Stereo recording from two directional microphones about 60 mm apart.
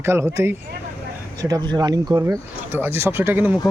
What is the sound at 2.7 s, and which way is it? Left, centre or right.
Speech, right.